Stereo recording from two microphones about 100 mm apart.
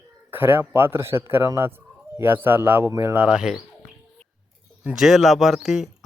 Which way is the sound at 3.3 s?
5° right (ahead or behind).